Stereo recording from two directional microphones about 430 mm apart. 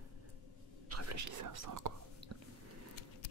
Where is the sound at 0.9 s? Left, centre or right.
Right.